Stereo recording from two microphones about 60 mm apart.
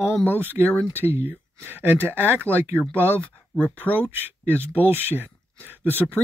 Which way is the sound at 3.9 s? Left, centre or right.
Right.